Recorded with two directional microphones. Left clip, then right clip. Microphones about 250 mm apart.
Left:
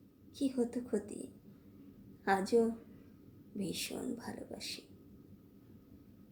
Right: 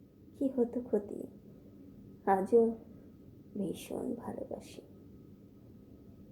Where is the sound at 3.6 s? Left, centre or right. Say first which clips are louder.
Right 2 dB; centre.